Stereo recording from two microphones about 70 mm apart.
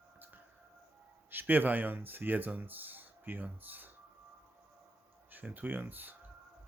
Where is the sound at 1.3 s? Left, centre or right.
Right.